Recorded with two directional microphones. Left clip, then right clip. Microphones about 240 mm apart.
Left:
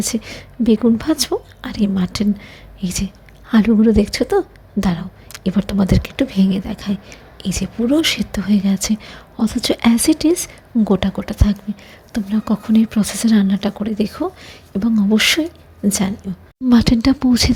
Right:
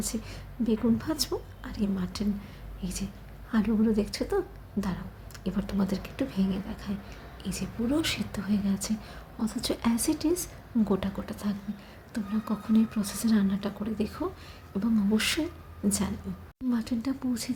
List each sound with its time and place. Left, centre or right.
0.0 s a woman's voice: left